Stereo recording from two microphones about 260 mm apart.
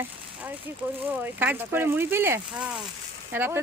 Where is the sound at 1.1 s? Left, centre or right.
Centre.